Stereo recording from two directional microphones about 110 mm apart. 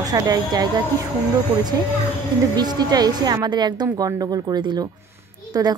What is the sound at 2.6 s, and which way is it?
A woman's voice, 40° right (ahead or behind).